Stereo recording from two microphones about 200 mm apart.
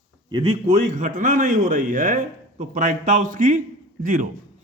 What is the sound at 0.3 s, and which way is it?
Speech, 25° right (ahead or behind).